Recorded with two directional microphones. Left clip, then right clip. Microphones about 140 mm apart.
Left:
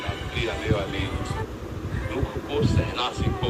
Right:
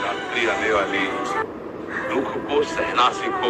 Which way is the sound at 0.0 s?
40° right (ahead or behind).